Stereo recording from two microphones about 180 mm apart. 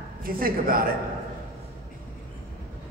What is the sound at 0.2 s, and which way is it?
Speech, 55° right (ahead or behind).